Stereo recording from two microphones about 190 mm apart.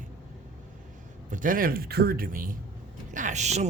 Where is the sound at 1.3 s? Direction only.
45° right (ahead or behind).